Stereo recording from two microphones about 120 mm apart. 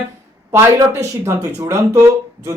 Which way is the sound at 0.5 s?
25° right (ahead or behind).